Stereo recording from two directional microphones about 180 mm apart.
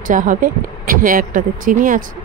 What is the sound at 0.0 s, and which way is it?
Speech, 45° right (ahead or behind).